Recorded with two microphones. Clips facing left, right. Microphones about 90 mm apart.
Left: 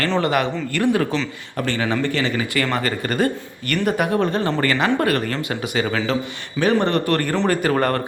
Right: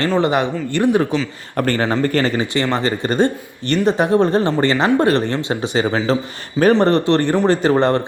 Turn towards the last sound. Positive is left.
turn(degrees=-20)  # may be behind; listen again after turning